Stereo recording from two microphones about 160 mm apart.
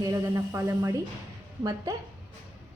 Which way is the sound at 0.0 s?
20° right (ahead or behind).